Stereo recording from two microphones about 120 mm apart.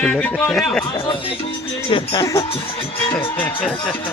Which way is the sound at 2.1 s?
30° left (ahead or behind).